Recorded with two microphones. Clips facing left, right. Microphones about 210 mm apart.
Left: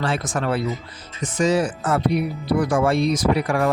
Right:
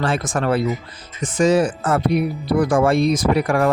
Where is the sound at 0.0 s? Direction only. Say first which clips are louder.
Right 3 dB; 50° right (ahead or behind).